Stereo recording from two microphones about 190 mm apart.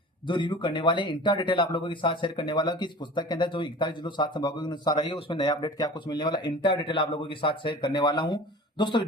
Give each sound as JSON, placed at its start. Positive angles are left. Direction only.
{"t": 0.3, "sound": "speech", "side_deg": 25}